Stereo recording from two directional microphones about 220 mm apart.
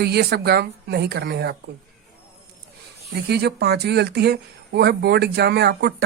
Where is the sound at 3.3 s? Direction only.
50° right (ahead or behind).